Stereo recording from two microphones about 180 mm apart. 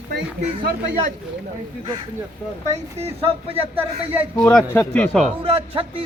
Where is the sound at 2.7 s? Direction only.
35° right (ahead or behind).